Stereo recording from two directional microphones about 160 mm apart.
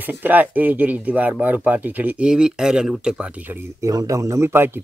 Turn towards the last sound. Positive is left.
turn(degrees=-15)  # may be behind; listen again after turning